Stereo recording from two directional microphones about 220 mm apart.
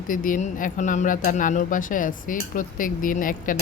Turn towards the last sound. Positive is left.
turn(degrees=40)  # may be behind; listen again after turning